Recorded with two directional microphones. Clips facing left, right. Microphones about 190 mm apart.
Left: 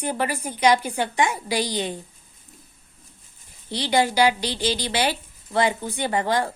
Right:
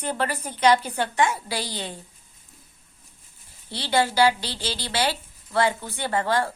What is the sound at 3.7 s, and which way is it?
Speech, 15° left (ahead or behind).